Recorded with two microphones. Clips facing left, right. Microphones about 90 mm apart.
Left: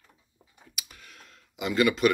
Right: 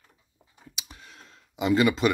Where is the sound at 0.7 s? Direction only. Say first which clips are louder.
Right 1 dB; 25° right (ahead or behind).